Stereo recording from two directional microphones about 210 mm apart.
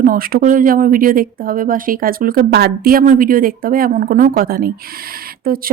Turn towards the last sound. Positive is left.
turn(degrees=-45)  # may be behind; listen again after turning